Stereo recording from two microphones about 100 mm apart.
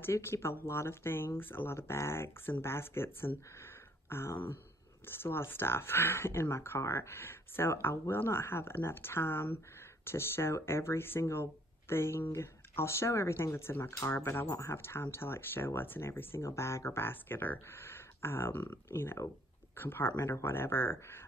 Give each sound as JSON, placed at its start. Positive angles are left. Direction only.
{"t": 0.0, "sound": "speech", "side_deg": 25}